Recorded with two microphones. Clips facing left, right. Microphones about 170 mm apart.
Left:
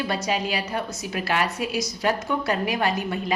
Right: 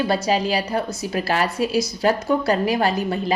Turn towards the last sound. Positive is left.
turn(degrees=-35)  # may be behind; listen again after turning